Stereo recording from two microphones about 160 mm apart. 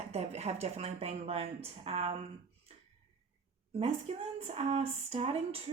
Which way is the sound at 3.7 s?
40° right (ahead or behind).